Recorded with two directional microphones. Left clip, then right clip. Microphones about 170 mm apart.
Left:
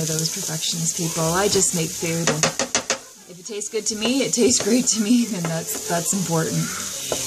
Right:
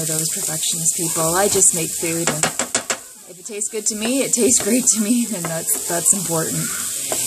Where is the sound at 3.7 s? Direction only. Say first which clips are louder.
Right 1 dB; 25° right (ahead or behind).